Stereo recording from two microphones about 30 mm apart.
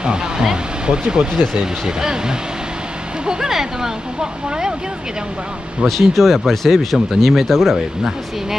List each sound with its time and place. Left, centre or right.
0.0 s speech: right
1.4 s speech: centre
5.9 s speech: centre
7.7 s speech: centre